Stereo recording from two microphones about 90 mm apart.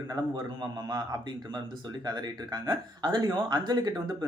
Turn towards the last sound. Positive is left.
turn(degrees=-50)  # may be behind; listen again after turning